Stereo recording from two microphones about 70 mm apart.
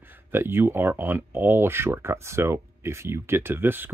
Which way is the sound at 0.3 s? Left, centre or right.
Right.